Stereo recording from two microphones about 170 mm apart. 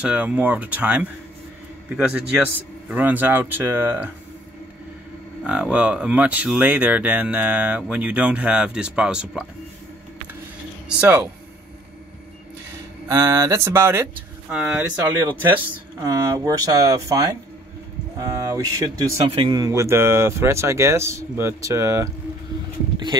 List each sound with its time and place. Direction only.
0.0 s speech: 10° right (ahead or behind)
5.4 s speech: 5° right (ahead or behind)
11.0 s speech: 15° right (ahead or behind)
13.1 s speech: 20° right (ahead or behind)